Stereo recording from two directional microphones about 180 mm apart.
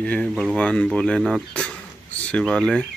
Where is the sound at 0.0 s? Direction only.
5° left (ahead or behind).